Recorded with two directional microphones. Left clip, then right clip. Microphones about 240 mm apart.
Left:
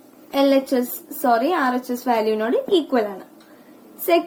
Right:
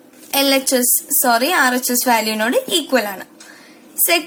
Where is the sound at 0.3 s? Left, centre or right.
Right.